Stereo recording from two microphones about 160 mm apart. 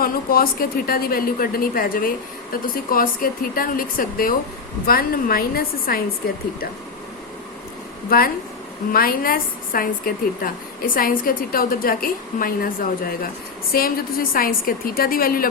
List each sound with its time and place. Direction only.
0.0 s a woman's voice: 65° left (ahead or behind)
8.1 s a woman's voice: 70° left (ahead or behind)
13.7 s speech: 65° left (ahead or behind)